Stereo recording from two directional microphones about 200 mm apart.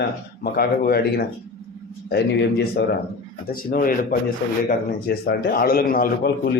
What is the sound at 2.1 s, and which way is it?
A man's voice, 55° left (ahead or behind).